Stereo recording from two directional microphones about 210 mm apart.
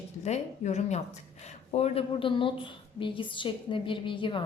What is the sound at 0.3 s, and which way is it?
A woman's voice, 30° left (ahead or behind).